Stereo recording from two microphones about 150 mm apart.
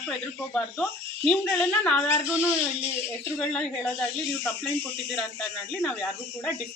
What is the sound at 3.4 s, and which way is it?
A woman's voice, 5° left (ahead or behind).